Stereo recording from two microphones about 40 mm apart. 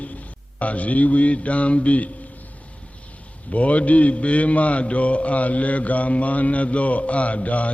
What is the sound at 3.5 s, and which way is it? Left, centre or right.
Mantra, left.